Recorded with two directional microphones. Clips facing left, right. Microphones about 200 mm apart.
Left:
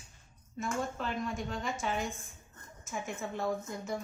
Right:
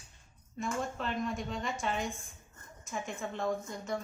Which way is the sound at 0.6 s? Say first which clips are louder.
Even; centre (ahead or behind).